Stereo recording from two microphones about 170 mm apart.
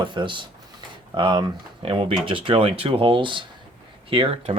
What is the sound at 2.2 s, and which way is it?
Speech, 30° right (ahead or behind).